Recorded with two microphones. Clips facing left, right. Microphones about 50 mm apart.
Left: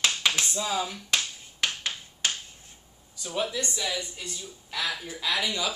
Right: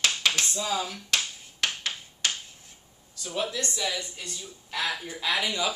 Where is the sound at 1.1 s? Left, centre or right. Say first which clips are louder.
Even; left.